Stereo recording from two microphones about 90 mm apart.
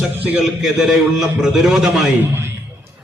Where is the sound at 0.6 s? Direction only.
5° right (ahead or behind).